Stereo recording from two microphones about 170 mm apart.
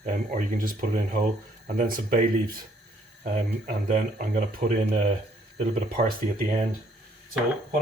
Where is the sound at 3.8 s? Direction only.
50° right (ahead or behind).